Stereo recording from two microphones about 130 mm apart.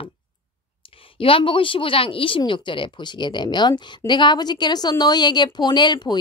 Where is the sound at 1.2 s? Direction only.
40° left (ahead or behind).